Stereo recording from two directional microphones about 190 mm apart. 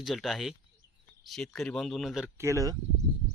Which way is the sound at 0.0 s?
Centre (ahead or behind).